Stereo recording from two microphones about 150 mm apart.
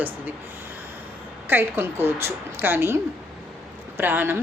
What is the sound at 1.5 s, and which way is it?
A woman's voice, 15° right (ahead or behind).